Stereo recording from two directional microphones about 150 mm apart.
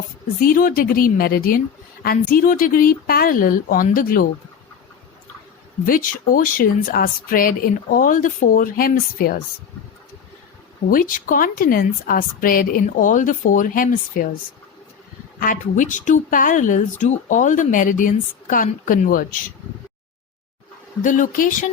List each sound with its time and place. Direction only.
0.3 s speech: 70° left (ahead or behind)
5.8 s speech: 65° left (ahead or behind)
10.8 s speech: 70° left (ahead or behind)
15.4 s speech: 60° left (ahead or behind)
21.0 s speech: 60° left (ahead or behind)